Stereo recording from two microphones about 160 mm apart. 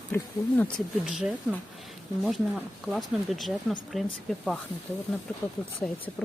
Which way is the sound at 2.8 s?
Centre (ahead or behind).